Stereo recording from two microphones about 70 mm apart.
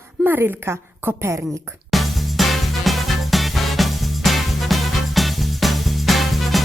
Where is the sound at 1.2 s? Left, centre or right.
Right.